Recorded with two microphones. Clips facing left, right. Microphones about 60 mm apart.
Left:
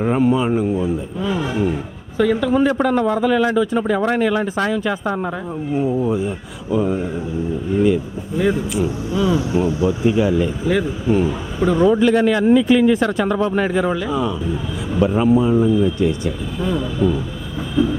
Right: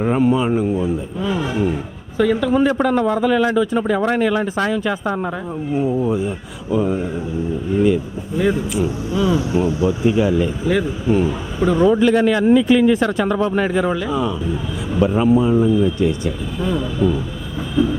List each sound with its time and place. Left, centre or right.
0.0 s speech: right
8.4 s speech: right